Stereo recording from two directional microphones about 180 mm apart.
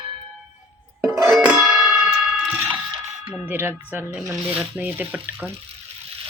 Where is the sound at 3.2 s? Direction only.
10° right (ahead or behind).